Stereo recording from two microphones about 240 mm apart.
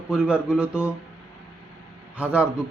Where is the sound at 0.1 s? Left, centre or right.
Centre.